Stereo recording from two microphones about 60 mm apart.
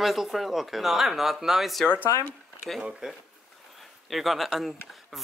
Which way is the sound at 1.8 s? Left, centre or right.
Left.